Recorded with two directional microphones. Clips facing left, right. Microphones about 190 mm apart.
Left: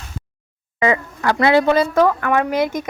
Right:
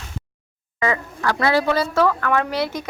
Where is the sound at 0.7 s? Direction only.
15° left (ahead or behind).